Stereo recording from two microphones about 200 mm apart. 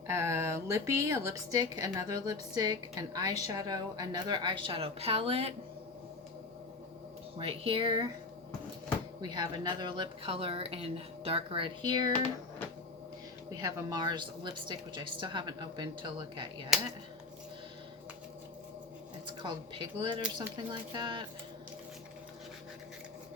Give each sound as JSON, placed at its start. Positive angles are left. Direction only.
{"t": 0.1, "sound": "a woman's voice", "side_deg": -15}
{"t": 7.3, "sound": "a woman's voice", "side_deg": -30}
{"t": 9.2, "sound": "a woman's voice", "side_deg": -20}
{"t": 13.6, "sound": "a woman's voice", "side_deg": -20}
{"t": 19.4, "sound": "a woman's voice", "side_deg": -20}